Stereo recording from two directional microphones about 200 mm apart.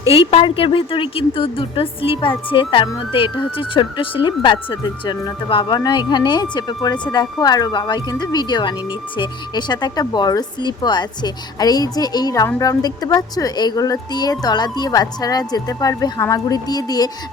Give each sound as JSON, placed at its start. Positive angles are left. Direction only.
{"t": 0.1, "sound": "speech", "side_deg": 30}